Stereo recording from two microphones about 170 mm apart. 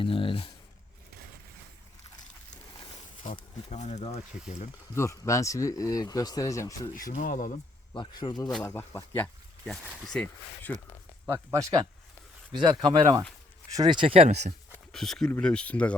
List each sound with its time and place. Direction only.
0.0 s speech: 30° left (ahead or behind)
3.3 s speech: 40° left (ahead or behind)
4.9 s speech: 15° left (ahead or behind)
6.9 s speech: 50° left (ahead or behind)
7.9 s speech: 25° left (ahead or behind); by 10.8 s 10° left (ahead or behind)
11.3 s speech: 20° right (ahead or behind); by 14.5 s 40° right (ahead or behind)
14.9 s speech: centre (ahead or behind)